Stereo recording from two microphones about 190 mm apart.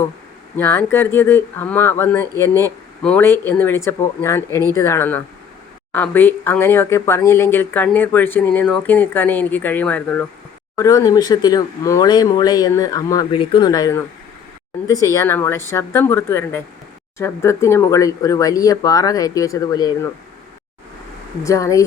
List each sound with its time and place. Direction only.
0.5 s speech: 10° left (ahead or behind)
21.4 s speech: 15° left (ahead or behind)